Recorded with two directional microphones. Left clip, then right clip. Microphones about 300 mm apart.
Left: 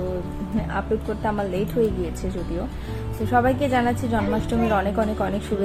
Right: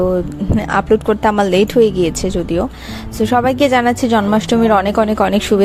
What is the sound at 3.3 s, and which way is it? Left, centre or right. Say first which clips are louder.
A woman's voice: right 7 dB; right.